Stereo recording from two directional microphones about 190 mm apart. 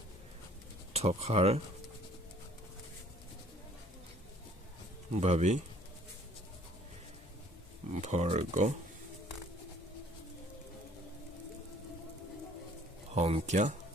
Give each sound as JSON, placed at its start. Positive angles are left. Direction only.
{"t": 0.9, "sound": "speech", "side_deg": -35}
{"t": 5.1, "sound": "speech", "side_deg": -35}
{"t": 7.9, "sound": "speech", "side_deg": -40}
{"t": 13.1, "sound": "speech", "side_deg": -35}